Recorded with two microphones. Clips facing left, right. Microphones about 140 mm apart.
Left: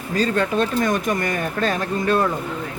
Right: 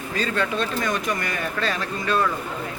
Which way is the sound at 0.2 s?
40° left (ahead or behind).